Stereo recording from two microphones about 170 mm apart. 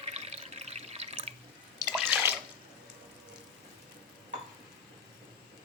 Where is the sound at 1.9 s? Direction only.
5° right (ahead or behind).